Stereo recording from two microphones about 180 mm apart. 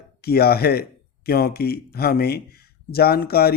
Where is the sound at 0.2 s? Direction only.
60° left (ahead or behind).